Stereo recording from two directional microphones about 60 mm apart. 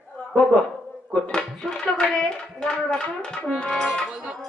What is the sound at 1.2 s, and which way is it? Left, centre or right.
Speech, left.